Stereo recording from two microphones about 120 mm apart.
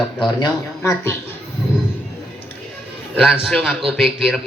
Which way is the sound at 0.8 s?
20° left (ahead or behind).